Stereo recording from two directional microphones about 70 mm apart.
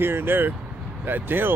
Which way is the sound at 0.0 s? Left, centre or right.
Right.